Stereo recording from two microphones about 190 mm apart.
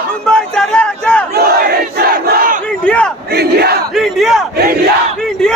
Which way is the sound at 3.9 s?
Centre (ahead or behind).